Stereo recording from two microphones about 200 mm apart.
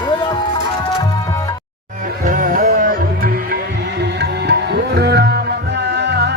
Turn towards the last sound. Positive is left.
turn(degrees=-55)  # may be behind; listen again after turning